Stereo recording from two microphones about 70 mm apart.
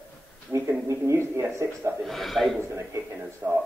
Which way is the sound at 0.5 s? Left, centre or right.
Right.